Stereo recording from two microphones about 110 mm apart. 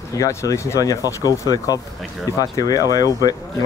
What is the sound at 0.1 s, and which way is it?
Speech, 30° left (ahead or behind).